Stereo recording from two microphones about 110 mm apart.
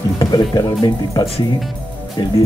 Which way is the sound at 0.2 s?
35° left (ahead or behind).